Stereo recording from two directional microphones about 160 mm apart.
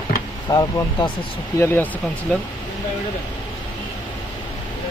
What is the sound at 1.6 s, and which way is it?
Speech, 15° left (ahead or behind).